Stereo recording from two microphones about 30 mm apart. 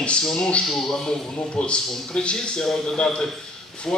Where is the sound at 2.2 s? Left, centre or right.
Left.